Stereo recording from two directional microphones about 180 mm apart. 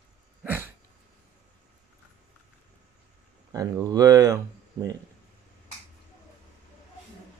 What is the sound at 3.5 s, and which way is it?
Speech, 20° right (ahead or behind).